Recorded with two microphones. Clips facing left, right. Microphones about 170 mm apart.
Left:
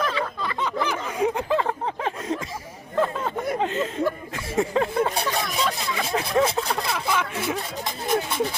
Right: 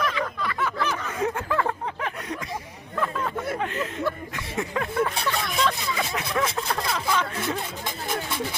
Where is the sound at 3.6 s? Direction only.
25° left (ahead or behind).